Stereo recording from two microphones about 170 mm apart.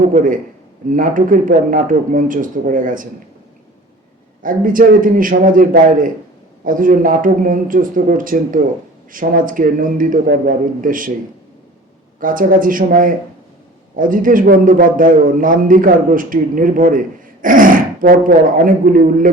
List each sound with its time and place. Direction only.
0.1 s a man's voice: 50° right (ahead or behind)
4.4 s a man's voice: 55° right (ahead or behind)
12.2 s a man's voice: 55° right (ahead or behind)